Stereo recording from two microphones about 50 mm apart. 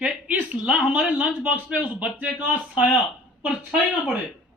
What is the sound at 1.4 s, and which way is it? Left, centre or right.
Speech, right.